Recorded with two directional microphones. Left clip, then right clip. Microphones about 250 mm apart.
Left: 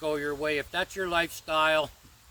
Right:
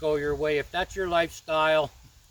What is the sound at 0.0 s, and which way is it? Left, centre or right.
Speech, centre.